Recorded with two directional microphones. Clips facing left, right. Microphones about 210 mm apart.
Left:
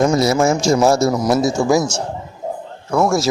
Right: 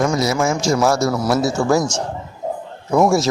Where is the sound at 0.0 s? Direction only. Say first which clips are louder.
Left 3 dB; 25° left (ahead or behind).